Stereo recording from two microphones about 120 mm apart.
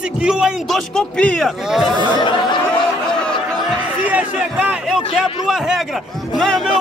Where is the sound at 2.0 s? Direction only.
40° left (ahead or behind).